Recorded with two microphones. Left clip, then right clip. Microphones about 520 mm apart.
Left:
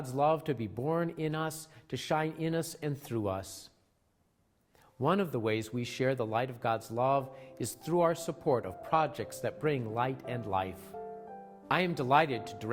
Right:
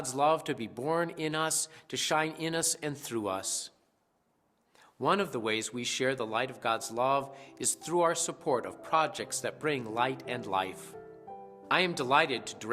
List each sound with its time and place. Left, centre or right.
0.1 s speech: left
4.9 s speech: left